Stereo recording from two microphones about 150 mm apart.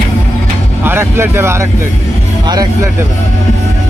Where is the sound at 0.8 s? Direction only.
15° right (ahead or behind).